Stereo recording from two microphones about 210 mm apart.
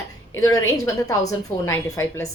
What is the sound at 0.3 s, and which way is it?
A woman's voice, 15° left (ahead or behind).